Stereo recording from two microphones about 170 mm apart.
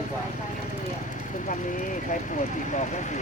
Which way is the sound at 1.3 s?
50° left (ahead or behind).